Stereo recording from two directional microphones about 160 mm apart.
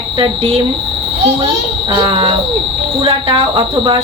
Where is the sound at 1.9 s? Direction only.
30° right (ahead or behind).